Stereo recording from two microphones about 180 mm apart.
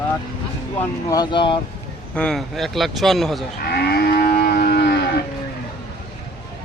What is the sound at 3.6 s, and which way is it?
Livestock, 60° left (ahead or behind).